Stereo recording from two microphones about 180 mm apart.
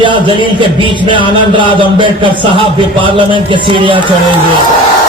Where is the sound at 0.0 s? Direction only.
25° right (ahead or behind).